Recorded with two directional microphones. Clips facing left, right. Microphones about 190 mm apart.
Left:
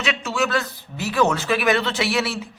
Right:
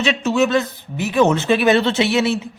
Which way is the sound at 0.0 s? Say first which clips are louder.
Right 7 dB; 25° right (ahead or behind).